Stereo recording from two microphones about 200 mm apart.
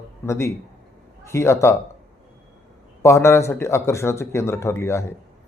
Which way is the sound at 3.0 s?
15° left (ahead or behind).